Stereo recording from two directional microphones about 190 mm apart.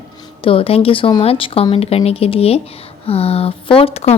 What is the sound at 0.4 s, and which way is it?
A woman's voice, 30° left (ahead or behind).